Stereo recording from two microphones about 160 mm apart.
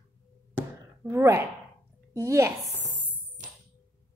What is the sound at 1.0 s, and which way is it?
A woman's voice, 15° right (ahead or behind).